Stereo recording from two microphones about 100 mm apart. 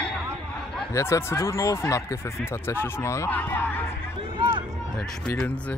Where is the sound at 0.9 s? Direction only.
30° left (ahead or behind).